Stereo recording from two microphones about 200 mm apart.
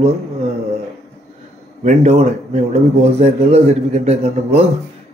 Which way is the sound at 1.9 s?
35° right (ahead or behind).